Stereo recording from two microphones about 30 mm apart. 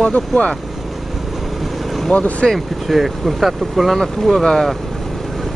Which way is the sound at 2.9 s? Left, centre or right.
Centre.